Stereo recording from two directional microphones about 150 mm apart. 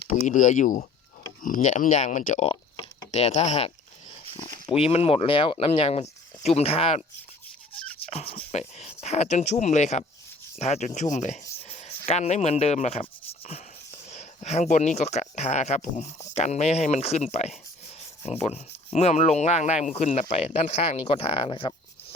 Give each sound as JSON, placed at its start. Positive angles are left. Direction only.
{"t": 0.1, "sound": "speech", "side_deg": 55}
{"t": 7.9, "sound": "a sound", "side_deg": 40}
{"t": 8.5, "sound": "speech", "side_deg": 45}